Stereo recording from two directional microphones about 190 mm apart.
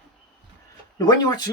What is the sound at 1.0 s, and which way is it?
Speech, 20° left (ahead or behind).